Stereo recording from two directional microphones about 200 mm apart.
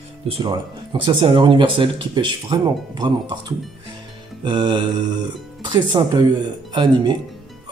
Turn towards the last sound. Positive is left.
turn(degrees=-20)  # may be behind; listen again after turning